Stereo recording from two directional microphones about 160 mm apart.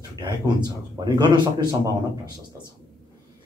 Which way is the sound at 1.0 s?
25° right (ahead or behind).